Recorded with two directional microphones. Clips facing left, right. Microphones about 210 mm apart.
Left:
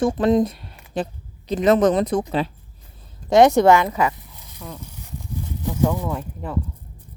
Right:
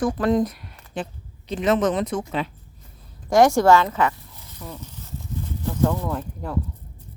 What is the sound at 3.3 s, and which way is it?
Speech, 20° left (ahead or behind).